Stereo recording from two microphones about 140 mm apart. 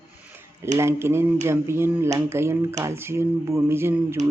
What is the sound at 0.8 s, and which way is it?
Speech, 20° right (ahead or behind).